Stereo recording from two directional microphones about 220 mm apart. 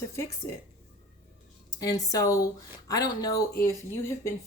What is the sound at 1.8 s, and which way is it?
A woman's voice, 15° left (ahead or behind).